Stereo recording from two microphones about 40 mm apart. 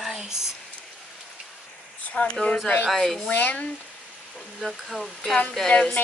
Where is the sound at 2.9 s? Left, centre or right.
Centre.